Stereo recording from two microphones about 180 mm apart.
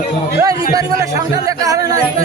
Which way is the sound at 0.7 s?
20° right (ahead or behind).